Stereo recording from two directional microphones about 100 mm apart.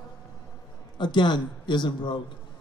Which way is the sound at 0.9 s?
50° left (ahead or behind).